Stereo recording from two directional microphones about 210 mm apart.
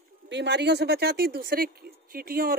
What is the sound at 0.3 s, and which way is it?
Speech, 55° right (ahead or behind).